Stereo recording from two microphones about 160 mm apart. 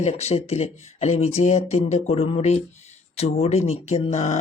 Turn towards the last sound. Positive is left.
turn(degrees=45)  # may be behind; listen again after turning